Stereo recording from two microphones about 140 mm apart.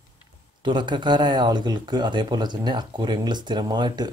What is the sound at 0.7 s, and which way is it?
Speech, 35° right (ahead or behind).